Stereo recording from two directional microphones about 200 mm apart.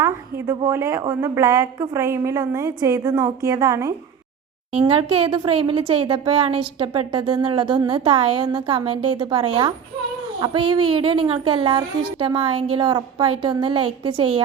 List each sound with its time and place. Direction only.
0.0 s a woman's voice: 15° right (ahead or behind)
4.9 s a woman's voice: 30° right (ahead or behind)